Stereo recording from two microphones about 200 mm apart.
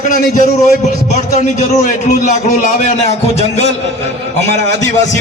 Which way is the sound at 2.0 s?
40° left (ahead or behind).